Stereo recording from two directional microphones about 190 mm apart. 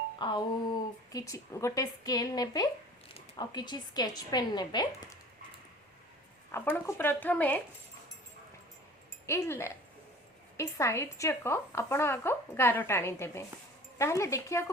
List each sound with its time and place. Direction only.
0.2 s a sound: 25° left (ahead or behind)
1.1 s speech: 15° left (ahead or behind)
6.5 s a woman's voice: 10° left (ahead or behind)
9.2 s a woman's voice: 15° left (ahead or behind)